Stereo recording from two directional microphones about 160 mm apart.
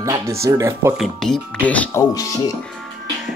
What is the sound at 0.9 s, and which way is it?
Speech, 5° left (ahead or behind).